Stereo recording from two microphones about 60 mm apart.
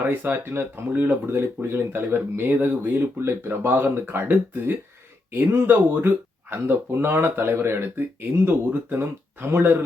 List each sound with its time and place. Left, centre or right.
0.0 s speech: right
1.3 s speech: right